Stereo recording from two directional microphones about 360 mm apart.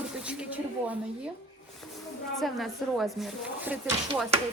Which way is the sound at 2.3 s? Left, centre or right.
Centre.